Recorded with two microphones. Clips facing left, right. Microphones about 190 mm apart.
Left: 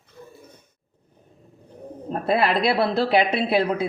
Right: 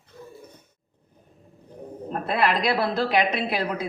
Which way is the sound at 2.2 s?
30° left (ahead or behind).